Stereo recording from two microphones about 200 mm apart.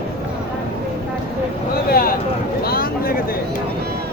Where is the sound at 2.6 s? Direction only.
50° left (ahead or behind).